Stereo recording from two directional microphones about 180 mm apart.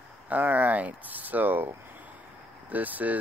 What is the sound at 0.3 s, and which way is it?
Speech, 10° right (ahead or behind).